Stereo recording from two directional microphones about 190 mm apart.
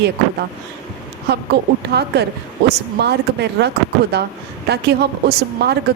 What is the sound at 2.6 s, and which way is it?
A woman's voice, 60° right (ahead or behind).